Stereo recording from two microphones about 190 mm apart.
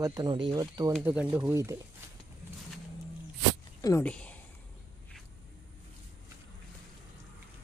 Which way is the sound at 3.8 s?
15° left (ahead or behind).